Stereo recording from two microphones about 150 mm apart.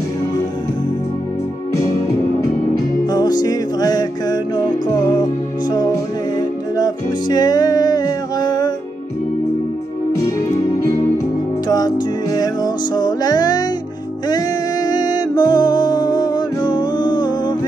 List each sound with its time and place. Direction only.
3.1 s music: 25° left (ahead or behind)
6.8 s music: 25° left (ahead or behind)
11.6 s music: 25° left (ahead or behind)